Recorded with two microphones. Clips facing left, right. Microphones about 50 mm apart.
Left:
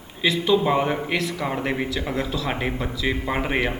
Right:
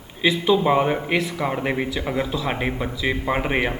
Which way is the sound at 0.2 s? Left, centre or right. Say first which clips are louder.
Right 1 dB; centre.